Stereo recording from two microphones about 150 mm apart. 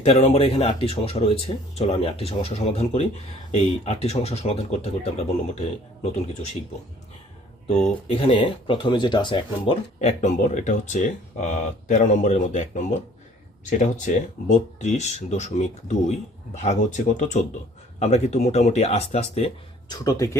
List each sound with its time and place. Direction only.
0.0 s speech: 40° left (ahead or behind)
8.0 s speech: 35° left (ahead or behind)
10.0 s speech: 50° left (ahead or behind)
17.2 s speech: 55° left (ahead or behind)
19.9 s speech: 20° left (ahead or behind)